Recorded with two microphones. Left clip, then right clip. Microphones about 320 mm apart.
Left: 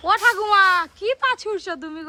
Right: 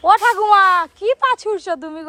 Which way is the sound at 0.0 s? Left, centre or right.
Centre.